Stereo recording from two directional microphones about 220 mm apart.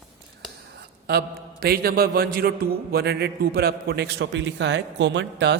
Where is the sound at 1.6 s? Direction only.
45° right (ahead or behind).